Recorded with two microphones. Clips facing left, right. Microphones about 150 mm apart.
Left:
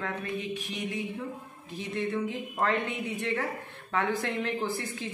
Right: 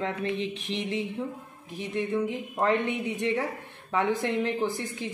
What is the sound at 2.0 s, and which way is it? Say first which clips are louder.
Speech: right 3 dB; 15° right (ahead or behind).